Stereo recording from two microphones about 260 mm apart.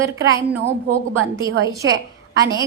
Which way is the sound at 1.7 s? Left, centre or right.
Centre.